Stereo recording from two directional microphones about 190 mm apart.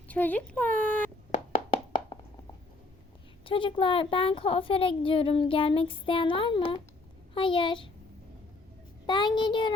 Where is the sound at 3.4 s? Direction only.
30° left (ahead or behind).